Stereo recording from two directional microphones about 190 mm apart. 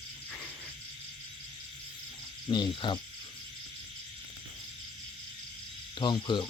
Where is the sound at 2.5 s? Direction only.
25° left (ahead or behind).